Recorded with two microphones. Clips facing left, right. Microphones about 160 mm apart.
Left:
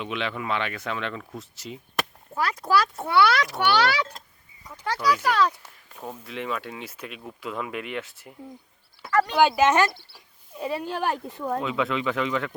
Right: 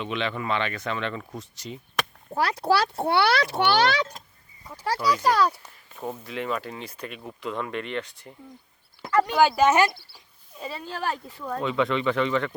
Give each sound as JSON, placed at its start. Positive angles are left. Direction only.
{"t": 0.0, "sound": "speech", "side_deg": 5}
{"t": 2.3, "sound": "a child's voice", "side_deg": -35}
{"t": 4.9, "sound": "speech", "side_deg": -10}
{"t": 9.0, "sound": "speech", "side_deg": -15}
{"t": 9.3, "sound": "speech", "side_deg": 0}
{"t": 10.2, "sound": "speech", "side_deg": 10}
{"t": 11.6, "sound": "speech", "side_deg": 5}